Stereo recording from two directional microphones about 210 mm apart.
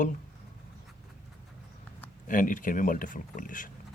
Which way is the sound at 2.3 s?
40° left (ahead or behind).